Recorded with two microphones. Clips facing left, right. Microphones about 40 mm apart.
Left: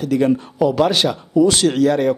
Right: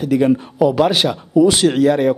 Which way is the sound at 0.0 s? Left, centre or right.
Centre.